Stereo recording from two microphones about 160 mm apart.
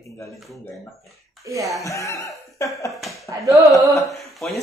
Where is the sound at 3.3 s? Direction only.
20° right (ahead or behind).